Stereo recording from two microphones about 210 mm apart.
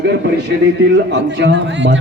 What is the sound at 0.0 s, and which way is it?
A man's voice, 55° right (ahead or behind).